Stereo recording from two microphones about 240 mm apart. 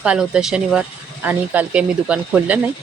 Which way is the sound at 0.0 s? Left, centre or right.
Centre.